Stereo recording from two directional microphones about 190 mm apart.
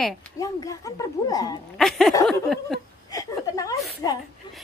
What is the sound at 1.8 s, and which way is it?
Speech, centre (ahead or behind).